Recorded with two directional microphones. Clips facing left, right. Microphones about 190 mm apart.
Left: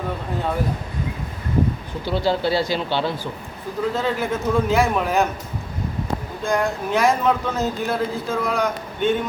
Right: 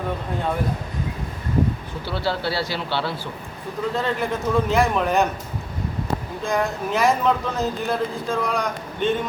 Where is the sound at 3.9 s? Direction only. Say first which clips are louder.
Right 1 dB; 5° left (ahead or behind).